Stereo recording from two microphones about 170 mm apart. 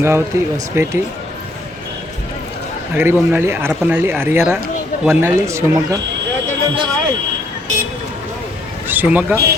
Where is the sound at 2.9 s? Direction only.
10° right (ahead or behind).